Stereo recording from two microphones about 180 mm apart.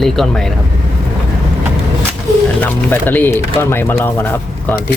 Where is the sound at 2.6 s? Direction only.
10° left (ahead or behind).